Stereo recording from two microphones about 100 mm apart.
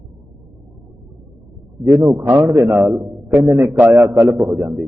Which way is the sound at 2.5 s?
25° right (ahead or behind).